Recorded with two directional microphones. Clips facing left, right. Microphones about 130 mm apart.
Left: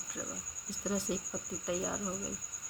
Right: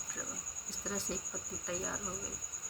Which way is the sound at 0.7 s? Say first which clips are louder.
Left 5 dB; 15° left (ahead or behind).